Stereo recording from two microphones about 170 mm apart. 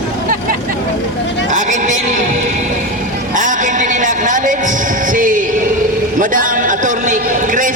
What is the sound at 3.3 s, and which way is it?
Music, 50° right (ahead or behind).